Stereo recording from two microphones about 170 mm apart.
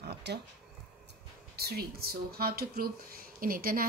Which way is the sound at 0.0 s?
75° right (ahead or behind).